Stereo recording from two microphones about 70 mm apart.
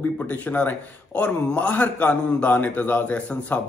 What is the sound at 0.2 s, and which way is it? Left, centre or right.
Speech, left.